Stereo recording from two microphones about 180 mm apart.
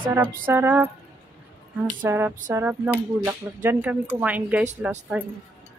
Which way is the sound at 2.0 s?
10° right (ahead or behind).